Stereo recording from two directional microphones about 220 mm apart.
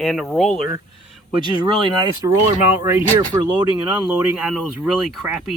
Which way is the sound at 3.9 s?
5° right (ahead or behind).